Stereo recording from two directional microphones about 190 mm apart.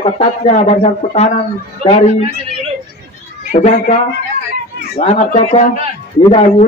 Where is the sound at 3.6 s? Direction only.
30° left (ahead or behind).